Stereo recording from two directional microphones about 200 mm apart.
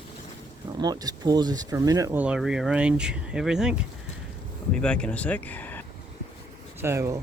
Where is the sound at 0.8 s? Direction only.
20° right (ahead or behind); by 5.8 s 10° left (ahead or behind).